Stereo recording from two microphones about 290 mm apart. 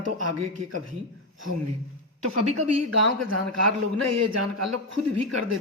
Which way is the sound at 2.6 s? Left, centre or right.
Right.